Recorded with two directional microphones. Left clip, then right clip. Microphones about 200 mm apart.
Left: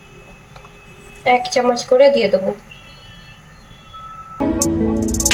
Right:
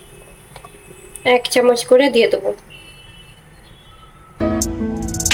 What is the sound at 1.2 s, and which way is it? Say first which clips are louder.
Speech: right 1 dB; 55° right (ahead or behind).